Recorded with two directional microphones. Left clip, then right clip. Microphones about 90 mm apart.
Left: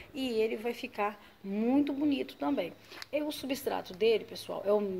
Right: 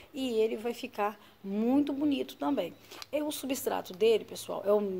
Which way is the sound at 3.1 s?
50° right (ahead or behind).